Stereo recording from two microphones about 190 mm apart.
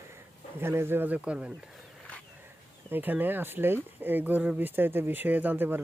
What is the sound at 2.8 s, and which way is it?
Speech, 10° right (ahead or behind).